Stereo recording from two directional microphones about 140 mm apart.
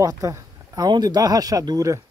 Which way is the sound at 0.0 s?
25° right (ahead or behind).